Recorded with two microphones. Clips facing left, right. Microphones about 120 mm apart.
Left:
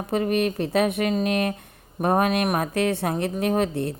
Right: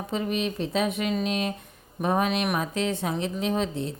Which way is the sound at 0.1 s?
55° left (ahead or behind).